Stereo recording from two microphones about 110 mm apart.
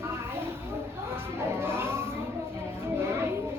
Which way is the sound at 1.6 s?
20° right (ahead or behind).